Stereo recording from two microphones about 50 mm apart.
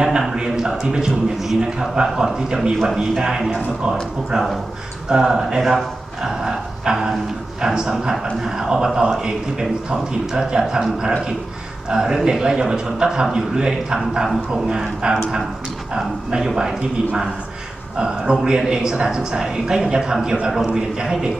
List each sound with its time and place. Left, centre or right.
0.3 s speech: centre
5.1 s speech: centre
14.5 s speech: centre